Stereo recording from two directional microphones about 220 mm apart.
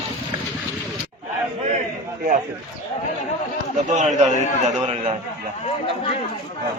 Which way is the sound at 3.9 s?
35° right (ahead or behind).